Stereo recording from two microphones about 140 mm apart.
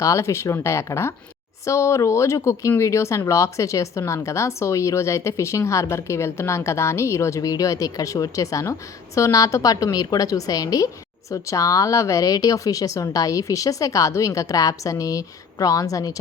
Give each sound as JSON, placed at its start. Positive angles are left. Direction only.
{"t": 0.0, "sound": "speech", "side_deg": 20}